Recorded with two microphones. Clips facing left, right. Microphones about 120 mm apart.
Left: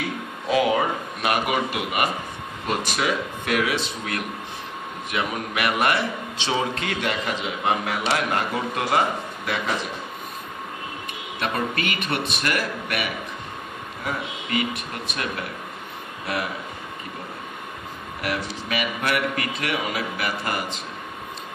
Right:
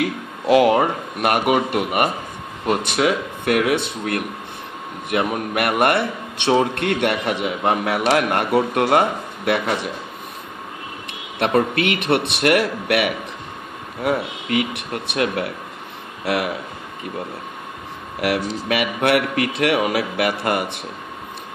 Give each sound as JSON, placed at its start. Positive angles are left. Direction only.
{"t": 0.0, "sound": "a man's voice", "side_deg": -70}
{"t": 11.7, "sound": "a man's voice", "side_deg": -70}
{"t": 18.2, "sound": "a man's voice", "side_deg": -65}